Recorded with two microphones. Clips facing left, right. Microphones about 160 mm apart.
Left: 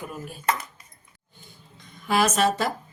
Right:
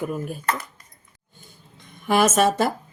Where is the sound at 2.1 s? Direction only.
50° right (ahead or behind).